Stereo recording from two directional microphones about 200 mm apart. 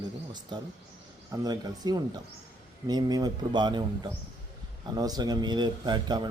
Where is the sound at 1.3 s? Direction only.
20° right (ahead or behind).